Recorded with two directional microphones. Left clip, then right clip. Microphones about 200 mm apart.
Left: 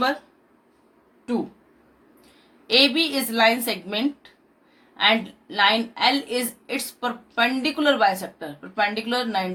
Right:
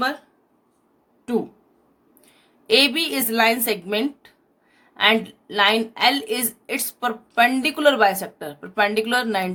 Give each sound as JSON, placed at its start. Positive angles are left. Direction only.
{"t": 2.6, "sound": "a woman's voice", "side_deg": -50}